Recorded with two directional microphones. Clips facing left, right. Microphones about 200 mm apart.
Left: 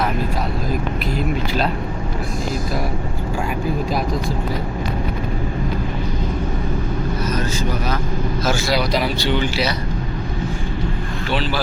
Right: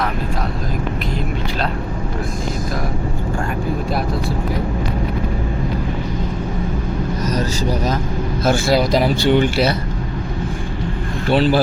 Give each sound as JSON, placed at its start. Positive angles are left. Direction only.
{"t": 7.3, "sound": "vehicle", "side_deg": -40}
{"t": 8.7, "sound": "speech", "side_deg": -45}